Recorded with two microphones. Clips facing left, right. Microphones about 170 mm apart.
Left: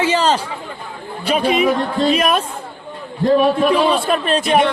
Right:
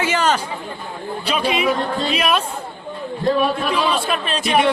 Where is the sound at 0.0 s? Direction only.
30° left (ahead or behind).